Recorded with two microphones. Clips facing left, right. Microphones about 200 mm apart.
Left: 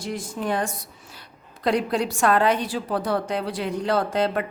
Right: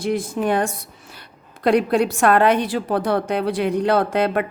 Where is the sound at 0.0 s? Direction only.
60° right (ahead or behind).